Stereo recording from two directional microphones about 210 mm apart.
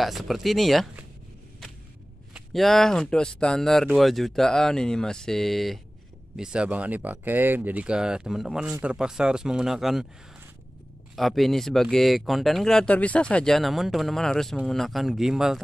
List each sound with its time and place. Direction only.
0.0 s speech: centre (ahead or behind)
2.3 s speech: centre (ahead or behind)
11.1 s speech: centre (ahead or behind)